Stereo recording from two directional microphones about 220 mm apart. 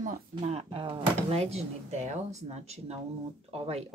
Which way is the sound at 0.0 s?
30° right (ahead or behind).